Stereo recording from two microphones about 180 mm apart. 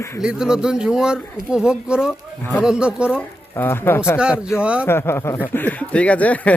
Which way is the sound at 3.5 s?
10° left (ahead or behind).